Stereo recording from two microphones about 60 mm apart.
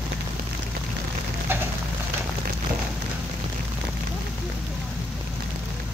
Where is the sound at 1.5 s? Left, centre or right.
Right.